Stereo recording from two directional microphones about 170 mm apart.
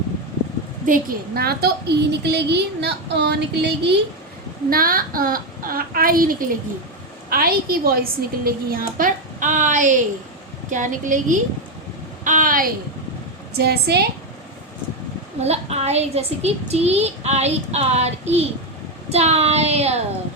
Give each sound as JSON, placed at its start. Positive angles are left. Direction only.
{"t": 0.9, "sound": "a woman's voice", "side_deg": -65}
{"t": 4.7, "sound": "a woman's voice", "side_deg": -60}
{"t": 12.2, "sound": "a sound", "side_deg": -50}
{"t": 13.5, "sound": "a woman's voice", "side_deg": -70}
{"t": 15.4, "sound": "a child's voice", "side_deg": -40}